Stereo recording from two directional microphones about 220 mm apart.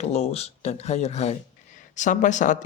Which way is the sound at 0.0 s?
30° left (ahead or behind).